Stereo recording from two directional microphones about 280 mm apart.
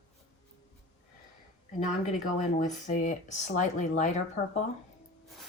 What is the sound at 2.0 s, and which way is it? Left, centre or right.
Speech, left.